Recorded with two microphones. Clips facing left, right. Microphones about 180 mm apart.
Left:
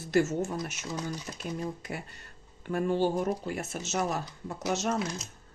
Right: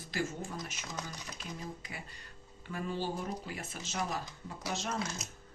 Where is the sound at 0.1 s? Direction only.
55° left (ahead or behind).